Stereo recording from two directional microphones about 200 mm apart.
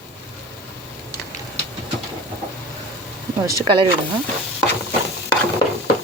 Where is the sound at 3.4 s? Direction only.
20° right (ahead or behind).